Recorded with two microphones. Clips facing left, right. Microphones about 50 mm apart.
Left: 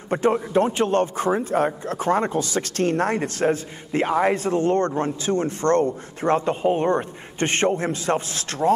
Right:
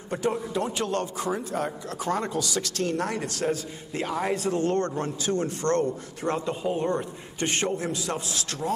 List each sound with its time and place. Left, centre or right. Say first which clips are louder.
0.1 s a man's voice: left 7 dB; left